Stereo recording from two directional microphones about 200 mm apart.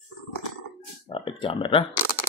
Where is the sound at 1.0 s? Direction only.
25° left (ahead or behind).